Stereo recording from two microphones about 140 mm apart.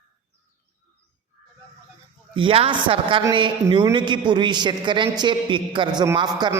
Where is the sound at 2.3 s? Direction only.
40° right (ahead or behind).